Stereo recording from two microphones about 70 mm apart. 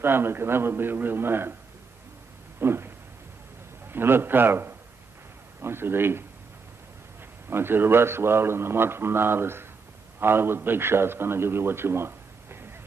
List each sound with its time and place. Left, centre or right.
0.0 s a man's voice: right
2.6 s a sound: right
3.9 s a man's voice: right
7.4 s a man's voice: right